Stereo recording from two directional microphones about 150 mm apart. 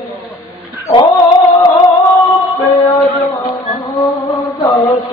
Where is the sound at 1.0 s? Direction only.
30° left (ahead or behind).